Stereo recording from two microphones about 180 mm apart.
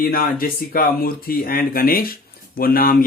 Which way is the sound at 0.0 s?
55° left (ahead or behind).